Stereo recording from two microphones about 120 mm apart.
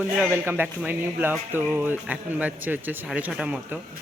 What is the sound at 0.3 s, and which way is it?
Speech, 15° right (ahead or behind).